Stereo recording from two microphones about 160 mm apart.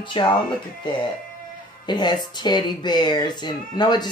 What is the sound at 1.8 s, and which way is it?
Speech, 25° left (ahead or behind).